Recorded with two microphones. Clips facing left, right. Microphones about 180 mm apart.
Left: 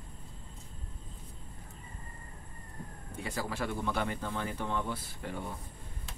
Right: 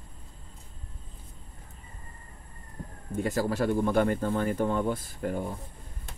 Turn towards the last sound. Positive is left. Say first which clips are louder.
# right 8 dB
turn(degrees=-45)  # may be behind; listen again after turning